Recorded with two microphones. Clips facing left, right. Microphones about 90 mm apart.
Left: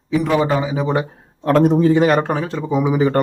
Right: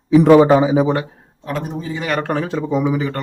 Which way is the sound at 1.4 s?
80° left.